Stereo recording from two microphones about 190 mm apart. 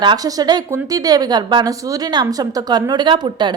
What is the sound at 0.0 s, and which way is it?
A woman's voice, 20° right (ahead or behind).